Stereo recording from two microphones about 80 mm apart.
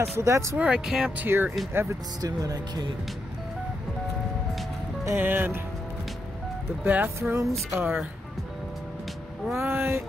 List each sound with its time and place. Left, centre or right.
0.0 s speech: right
0.6 s speech: centre
1.1 s speech: right
2.2 s speech: right
5.1 s speech: right
6.8 s speech: right
7.2 s speech: right
7.7 s speech: right
9.6 s speech: right